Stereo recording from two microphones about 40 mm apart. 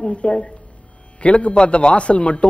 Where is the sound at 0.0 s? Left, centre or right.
Left.